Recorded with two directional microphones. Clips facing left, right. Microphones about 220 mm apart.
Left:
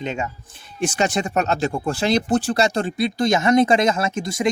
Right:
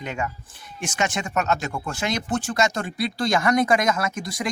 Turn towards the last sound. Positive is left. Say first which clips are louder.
# left 4 dB
turn(degrees=25)  # may be behind; listen again after turning